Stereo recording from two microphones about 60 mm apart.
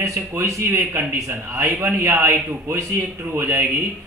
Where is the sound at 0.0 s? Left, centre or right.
Right.